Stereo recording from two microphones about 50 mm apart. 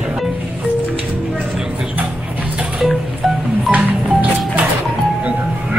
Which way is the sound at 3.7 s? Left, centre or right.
Right.